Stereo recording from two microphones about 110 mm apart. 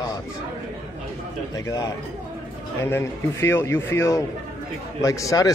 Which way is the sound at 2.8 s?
20° left (ahead or behind).